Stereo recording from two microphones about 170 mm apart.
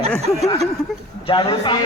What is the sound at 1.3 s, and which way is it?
Speech, 30° left (ahead or behind).